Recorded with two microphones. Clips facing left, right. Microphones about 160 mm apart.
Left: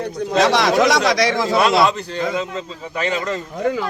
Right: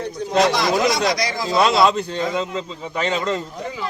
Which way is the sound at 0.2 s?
70° left (ahead or behind).